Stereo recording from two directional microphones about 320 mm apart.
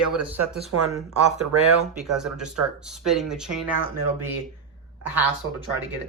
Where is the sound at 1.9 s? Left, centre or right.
Centre.